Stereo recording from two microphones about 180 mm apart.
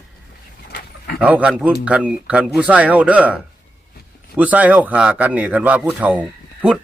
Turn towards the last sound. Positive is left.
turn(degrees=-5)  # may be behind; listen again after turning